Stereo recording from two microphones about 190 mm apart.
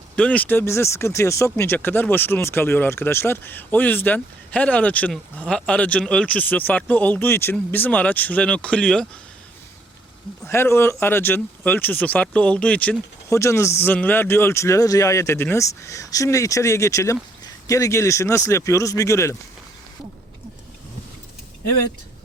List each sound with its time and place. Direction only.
0.2 s speech: 5° left (ahead or behind)
10.4 s speech: 15° left (ahead or behind)